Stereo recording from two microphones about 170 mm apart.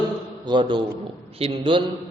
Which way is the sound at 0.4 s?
30° right (ahead or behind).